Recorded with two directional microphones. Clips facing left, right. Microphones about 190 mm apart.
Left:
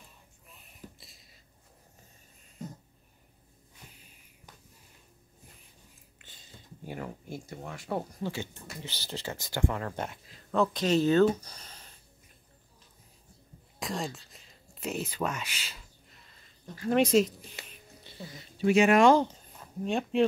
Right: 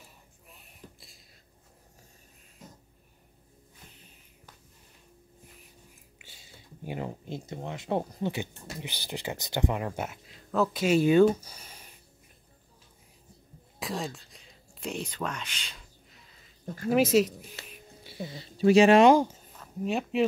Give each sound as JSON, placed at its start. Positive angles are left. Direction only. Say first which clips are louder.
{"t": 0.5, "sound": "a sound", "louder": "left 1 dB", "side_deg": 0}
{"t": 6.1, "sound": "speech", "louder": "left 2 dB", "side_deg": -10}
{"t": 10.0, "sound": "speech", "louder": "right 1 dB", "side_deg": 0}
{"t": 13.7, "sound": "whispering", "louder": "right 1 dB", "side_deg": 0}
{"t": 16.9, "sound": "a sound", "louder": "right 1 dB", "side_deg": -5}
{"t": 18.2, "sound": "speech", "louder": "right 4 dB", "side_deg": -30}
{"t": 19.0, "sound": "speech", "louder": "right 2 dB", "side_deg": -10}